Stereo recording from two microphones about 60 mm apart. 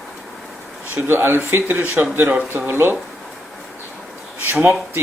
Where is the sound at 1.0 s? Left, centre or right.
Right.